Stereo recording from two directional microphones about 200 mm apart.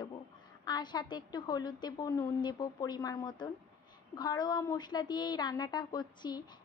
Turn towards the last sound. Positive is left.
turn(degrees=20)  # may be behind; listen again after turning